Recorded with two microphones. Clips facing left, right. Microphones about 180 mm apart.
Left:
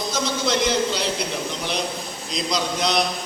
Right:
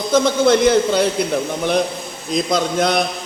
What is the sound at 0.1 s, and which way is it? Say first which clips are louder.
A man's voice: right 11 dB; 55° right (ahead or behind).